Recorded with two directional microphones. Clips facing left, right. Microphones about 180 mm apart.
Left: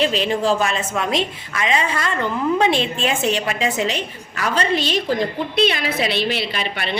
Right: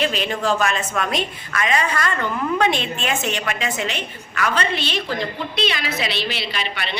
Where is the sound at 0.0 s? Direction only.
30° left (ahead or behind).